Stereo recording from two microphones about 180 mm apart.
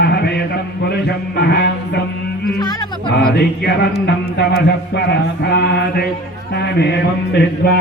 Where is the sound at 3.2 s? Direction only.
65° left (ahead or behind).